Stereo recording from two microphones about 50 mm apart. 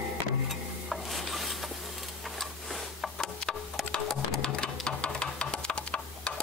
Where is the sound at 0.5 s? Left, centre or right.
Centre.